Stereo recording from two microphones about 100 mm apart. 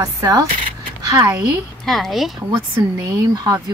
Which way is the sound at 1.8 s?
Centre (ahead or behind).